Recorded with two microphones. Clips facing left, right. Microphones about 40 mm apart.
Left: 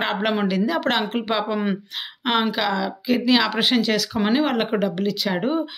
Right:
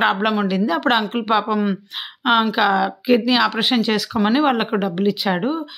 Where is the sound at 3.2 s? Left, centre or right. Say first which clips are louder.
Right 1 dB; centre.